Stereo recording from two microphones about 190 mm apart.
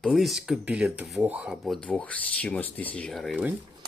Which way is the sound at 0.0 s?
Centre (ahead or behind).